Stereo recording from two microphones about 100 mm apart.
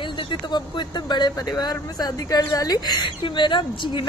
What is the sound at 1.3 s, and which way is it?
Speech, 35° left (ahead or behind).